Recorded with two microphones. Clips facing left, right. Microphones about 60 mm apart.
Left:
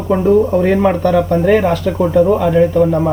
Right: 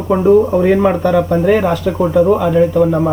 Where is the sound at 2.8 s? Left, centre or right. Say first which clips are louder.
Even; centre.